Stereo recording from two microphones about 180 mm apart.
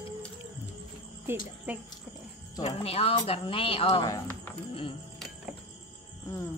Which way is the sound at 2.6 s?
35° left (ahead or behind).